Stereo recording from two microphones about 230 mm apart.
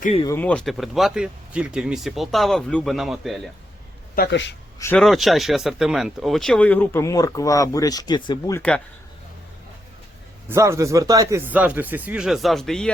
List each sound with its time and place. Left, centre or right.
0.0 s speech: left
0.3 s speech: centre
4.1 s speech: left
4.8 s speech: centre
10.5 s speech: centre